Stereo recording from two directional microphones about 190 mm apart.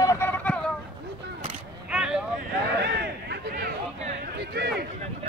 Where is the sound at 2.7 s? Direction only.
60° right (ahead or behind).